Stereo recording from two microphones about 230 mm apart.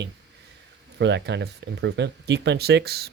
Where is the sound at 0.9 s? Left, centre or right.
Right.